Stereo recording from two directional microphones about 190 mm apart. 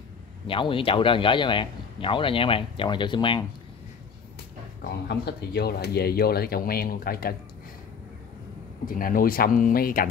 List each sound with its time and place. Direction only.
0.5 s speech: 25° left (ahead or behind)
5.0 s speech: 60° left (ahead or behind)
8.8 s speech: 45° left (ahead or behind)